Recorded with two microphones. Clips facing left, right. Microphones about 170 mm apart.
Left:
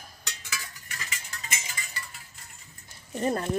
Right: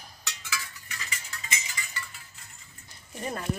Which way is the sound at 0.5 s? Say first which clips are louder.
Right 3 dB; 45° left (ahead or behind).